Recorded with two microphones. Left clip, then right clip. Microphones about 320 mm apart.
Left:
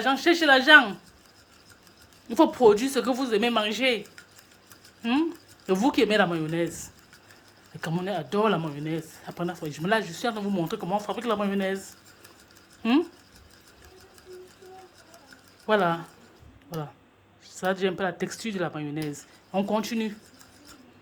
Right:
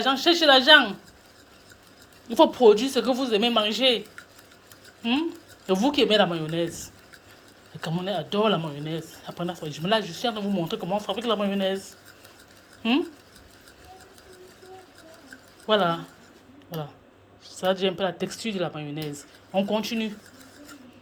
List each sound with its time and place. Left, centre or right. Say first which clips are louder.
0.0 s speech: right 2 dB; centre
2.3 s speech: right 2 dB; centre
5.6 s speech: right 1 dB; centre
15.6 s speech: right 1 dB; centre
17.4 s speech: right 2 dB; centre